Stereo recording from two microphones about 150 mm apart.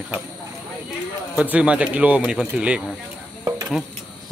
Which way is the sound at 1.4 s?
10° right (ahead or behind).